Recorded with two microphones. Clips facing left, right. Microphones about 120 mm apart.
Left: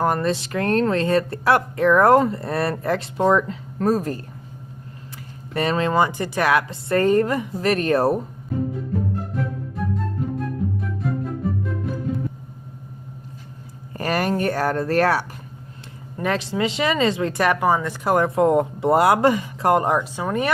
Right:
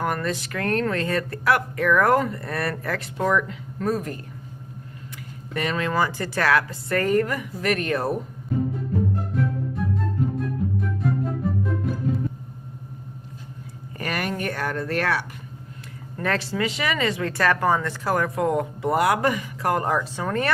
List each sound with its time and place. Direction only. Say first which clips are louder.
0.0 s speech: left 5 dB; 30° left (ahead or behind)
5.5 s speech: left 4 dB; 30° left (ahead or behind)
9.3 s music: right 2 dB; centre (ahead or behind)
14.0 s speech: left 6 dB; 35° left (ahead or behind)
16.1 s speech: left 2 dB; 15° left (ahead or behind)
18.1 s speech: left 6 dB; 25° left (ahead or behind)